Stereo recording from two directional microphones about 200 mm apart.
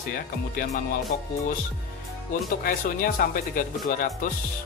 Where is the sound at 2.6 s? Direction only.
45° left (ahead or behind).